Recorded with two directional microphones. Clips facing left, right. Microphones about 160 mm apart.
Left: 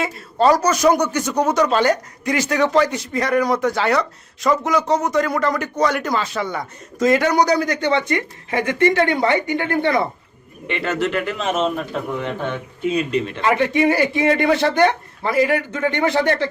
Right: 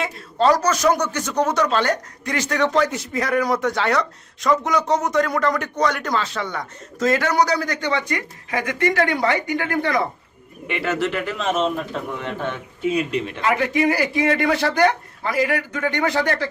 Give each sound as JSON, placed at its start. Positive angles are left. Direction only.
{"t": 0.0, "sound": "a man's voice", "side_deg": 10}
{"t": 10.7, "sound": "speech", "side_deg": -5}
{"t": 12.8, "sound": "speech", "side_deg": -10}
{"t": 13.4, "sound": "a man's voice", "side_deg": 25}